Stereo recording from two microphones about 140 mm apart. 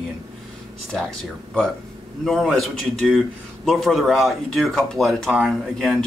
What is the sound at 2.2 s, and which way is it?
Speech, centre (ahead or behind).